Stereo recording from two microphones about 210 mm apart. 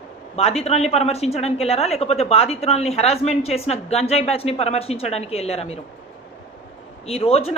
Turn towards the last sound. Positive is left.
turn(degrees=30)  # may be behind; listen again after turning